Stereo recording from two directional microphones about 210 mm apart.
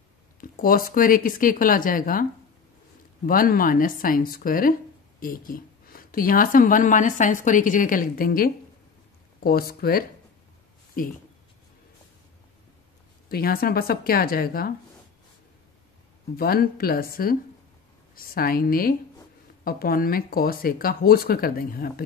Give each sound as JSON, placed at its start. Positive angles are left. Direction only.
{"t": 0.4, "sound": "speech", "side_deg": 40}
{"t": 3.3, "sound": "speech", "side_deg": 40}
{"t": 13.3, "sound": "speech", "side_deg": 45}
{"t": 16.3, "sound": "speech", "side_deg": 45}